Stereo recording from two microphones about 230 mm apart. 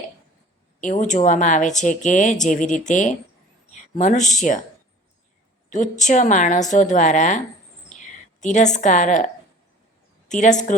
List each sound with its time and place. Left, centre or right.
0.8 s speech: left
5.7 s speech: left